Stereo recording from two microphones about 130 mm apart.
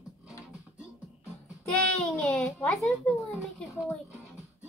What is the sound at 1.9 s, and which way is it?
A child's voice, 5° left (ahead or behind).